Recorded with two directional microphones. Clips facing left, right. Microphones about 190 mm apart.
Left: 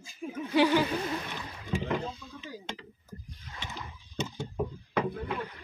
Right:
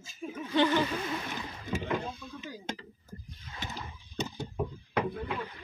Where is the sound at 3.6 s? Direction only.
40° right (ahead or behind).